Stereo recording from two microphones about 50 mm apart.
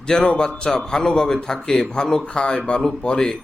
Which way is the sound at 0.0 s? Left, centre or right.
Centre.